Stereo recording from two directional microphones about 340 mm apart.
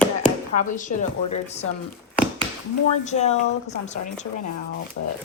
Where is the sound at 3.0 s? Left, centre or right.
Centre.